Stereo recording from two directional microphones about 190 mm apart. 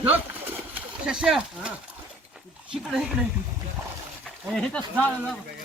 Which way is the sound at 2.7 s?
Centre (ahead or behind).